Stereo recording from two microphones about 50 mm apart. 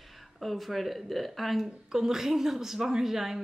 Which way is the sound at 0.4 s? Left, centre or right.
Centre.